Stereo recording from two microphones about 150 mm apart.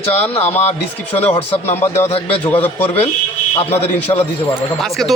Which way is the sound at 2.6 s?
15° left (ahead or behind).